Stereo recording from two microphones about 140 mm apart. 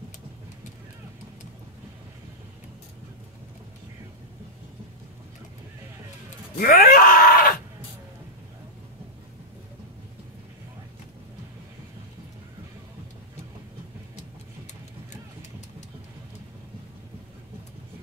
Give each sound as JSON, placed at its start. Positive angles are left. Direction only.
{"t": 6.6, "sound": "groan", "side_deg": 90}